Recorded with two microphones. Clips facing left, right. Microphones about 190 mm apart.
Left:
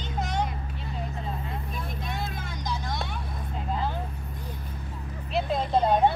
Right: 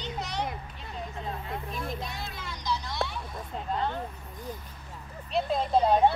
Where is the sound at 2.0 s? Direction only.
50° left (ahead or behind).